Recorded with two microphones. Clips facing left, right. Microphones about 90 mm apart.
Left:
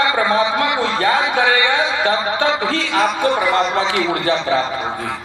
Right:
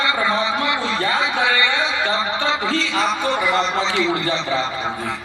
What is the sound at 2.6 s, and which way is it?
A man's voice, 45° left (ahead or behind).